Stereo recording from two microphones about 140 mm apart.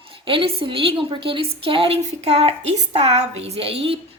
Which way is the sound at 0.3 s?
40° right (ahead or behind).